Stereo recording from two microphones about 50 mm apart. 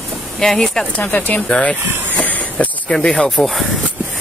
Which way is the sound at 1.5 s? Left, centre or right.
Centre.